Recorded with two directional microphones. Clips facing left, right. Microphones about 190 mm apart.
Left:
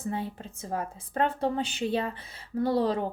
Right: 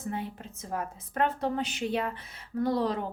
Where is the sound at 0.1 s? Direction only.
30° left (ahead or behind).